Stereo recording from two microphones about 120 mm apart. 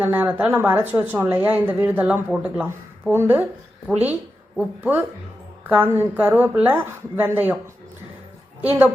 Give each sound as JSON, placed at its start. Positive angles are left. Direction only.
{"t": 0.0, "sound": "a woman's voice", "side_deg": -15}
{"t": 3.1, "sound": "a woman's voice", "side_deg": -20}